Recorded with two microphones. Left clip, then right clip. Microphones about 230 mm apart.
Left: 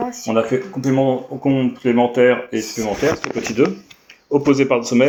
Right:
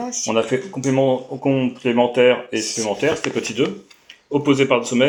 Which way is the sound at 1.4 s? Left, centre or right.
Left.